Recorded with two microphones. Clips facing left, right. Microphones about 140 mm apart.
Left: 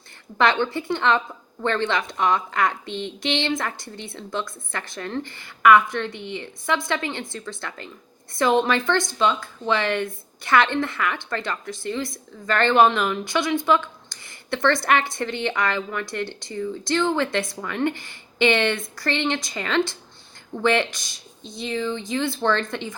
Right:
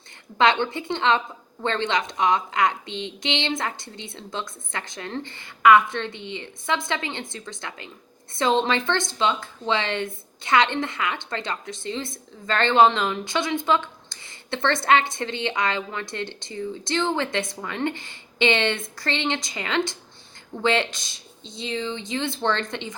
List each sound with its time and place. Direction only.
0.3 s speech: 20° right (ahead or behind)